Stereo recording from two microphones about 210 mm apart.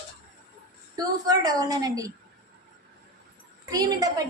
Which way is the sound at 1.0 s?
20° right (ahead or behind).